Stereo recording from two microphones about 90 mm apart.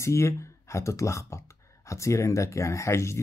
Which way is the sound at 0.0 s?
30° left (ahead or behind).